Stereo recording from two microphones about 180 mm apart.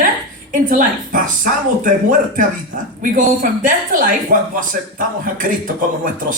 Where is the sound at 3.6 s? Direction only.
50° right (ahead or behind).